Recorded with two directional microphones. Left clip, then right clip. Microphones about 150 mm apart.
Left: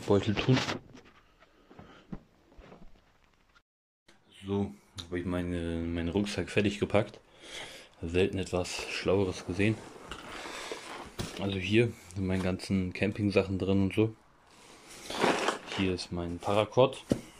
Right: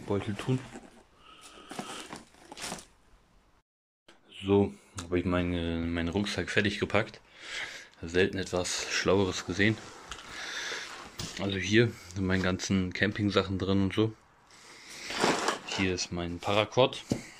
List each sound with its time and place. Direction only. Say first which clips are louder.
0.1 s speech: left 6 dB; 5° right (ahead or behind)
4.4 s speech: right 9 dB; 5° right (ahead or behind)
10.4 s a sound: right 6 dB; 10° left (ahead or behind)
11.3 s speech: right 2 dB; 5° left (ahead or behind)
15.0 s a sound: even; 20° left (ahead or behind)
15.7 s speech: right 2 dB; 10° left (ahead or behind)